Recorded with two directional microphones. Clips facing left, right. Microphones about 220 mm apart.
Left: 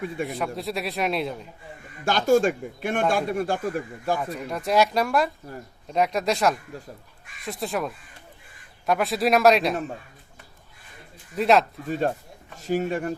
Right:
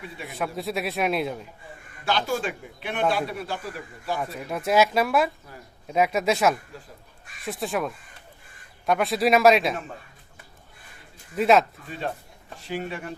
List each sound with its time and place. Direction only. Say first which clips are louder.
0.3 s a man's voice: left 1 dB; centre (ahead or behind)
2.0 s a man's voice: left 7 dB; 45° left (ahead or behind)
4.2 s a man's voice: even; 5° right (ahead or behind)
11.3 s a man's voice: even; centre (ahead or behind)
11.9 s a man's voice: left 7 dB; 45° left (ahead or behind)